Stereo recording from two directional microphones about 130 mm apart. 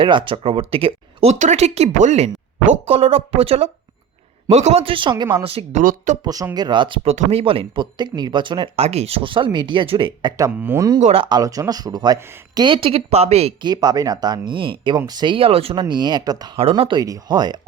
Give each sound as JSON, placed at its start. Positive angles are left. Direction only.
{"t": 0.0, "sound": "speech", "side_deg": -40}
{"t": 1.4, "sound": "speech", "side_deg": -60}
{"t": 2.8, "sound": "speech", "side_deg": -50}
{"t": 5.8, "sound": "speech", "side_deg": -90}
{"t": 6.2, "sound": "speech", "side_deg": -30}
{"t": 7.1, "sound": "speech", "side_deg": -50}
{"t": 10.3, "sound": "speech", "side_deg": -20}
{"t": 11.0, "sound": "speech", "side_deg": -50}
{"t": 11.3, "sound": "speech", "side_deg": -30}
{"t": 13.6, "sound": "speech", "side_deg": -30}
{"t": 15.8, "sound": "speech", "side_deg": -35}
{"t": 16.6, "sound": "speech", "side_deg": -45}
{"t": 17.0, "sound": "speech", "side_deg": -30}